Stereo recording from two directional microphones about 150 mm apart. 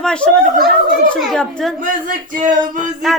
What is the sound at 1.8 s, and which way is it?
Speech, 60° right (ahead or behind).